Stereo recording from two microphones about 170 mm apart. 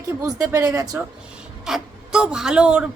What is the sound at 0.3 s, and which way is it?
Speech, 20° right (ahead or behind).